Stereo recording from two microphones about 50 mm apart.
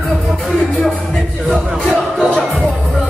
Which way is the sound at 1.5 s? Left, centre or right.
Centre.